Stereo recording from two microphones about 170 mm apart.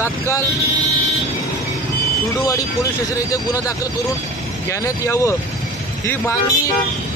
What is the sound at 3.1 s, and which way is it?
Speech, 20° left (ahead or behind).